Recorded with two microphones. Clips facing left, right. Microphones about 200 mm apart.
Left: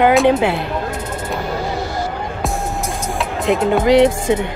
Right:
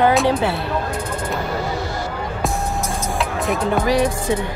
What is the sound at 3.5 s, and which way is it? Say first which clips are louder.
Speech: left 6 dB; 20° left (ahead or behind).